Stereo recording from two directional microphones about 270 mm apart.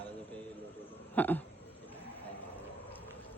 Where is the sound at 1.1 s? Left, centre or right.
Centre.